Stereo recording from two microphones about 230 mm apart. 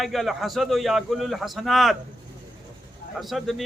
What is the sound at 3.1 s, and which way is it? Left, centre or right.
Speech, centre.